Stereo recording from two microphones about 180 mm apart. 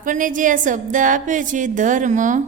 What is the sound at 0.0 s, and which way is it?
A woman's voice, 45° right (ahead or behind).